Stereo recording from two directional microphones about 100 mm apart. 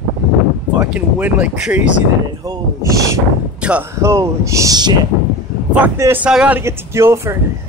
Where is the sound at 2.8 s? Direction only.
35° right (ahead or behind).